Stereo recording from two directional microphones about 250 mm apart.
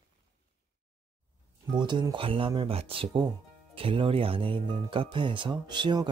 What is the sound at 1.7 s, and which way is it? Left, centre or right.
Speech, centre.